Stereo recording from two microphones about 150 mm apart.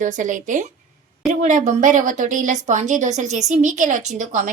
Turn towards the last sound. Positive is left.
turn(degrees=-55)  # may be behind; listen again after turning